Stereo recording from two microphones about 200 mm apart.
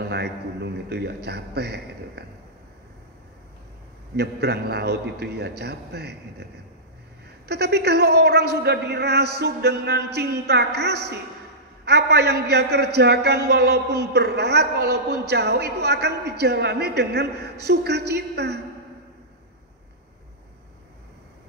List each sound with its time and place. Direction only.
0.1 s a man's voice: 55° right (ahead or behind)
4.2 s a man's voice: 55° right (ahead or behind)
7.4 s a man's voice: 55° right (ahead or behind)